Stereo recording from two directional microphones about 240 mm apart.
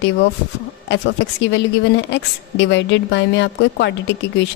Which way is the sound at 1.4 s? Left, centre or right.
Left.